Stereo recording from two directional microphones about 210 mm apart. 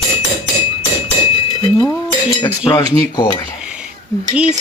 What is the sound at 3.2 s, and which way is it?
Speech, 20° left (ahead or behind).